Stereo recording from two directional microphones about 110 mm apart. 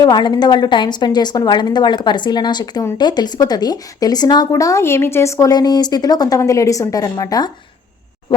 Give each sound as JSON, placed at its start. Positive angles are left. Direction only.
{"t": 0.0, "sound": "a woman's voice", "side_deg": 40}